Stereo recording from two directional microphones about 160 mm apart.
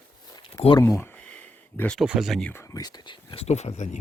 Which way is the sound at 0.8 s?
20° left (ahead or behind).